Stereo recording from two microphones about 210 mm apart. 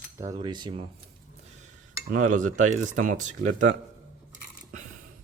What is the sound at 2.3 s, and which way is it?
Speech, 35° right (ahead or behind).